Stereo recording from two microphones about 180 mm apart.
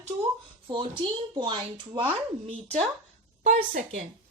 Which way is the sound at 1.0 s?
30° right (ahead or behind).